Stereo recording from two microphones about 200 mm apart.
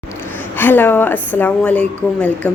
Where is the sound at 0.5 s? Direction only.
10° left (ahead or behind).